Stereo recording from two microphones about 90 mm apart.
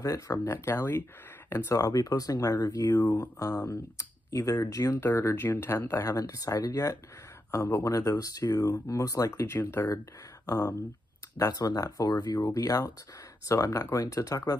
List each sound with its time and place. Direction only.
0.0 s speech: 40° left (ahead or behind)
0.7 s speech: 25° left (ahead or behind)
1.8 s speech: 40° left (ahead or behind)
5.0 s speech: 25° left (ahead or behind)
6.0 s speech: 40° left (ahead or behind)
10.4 s speech: 45° left (ahead or behind)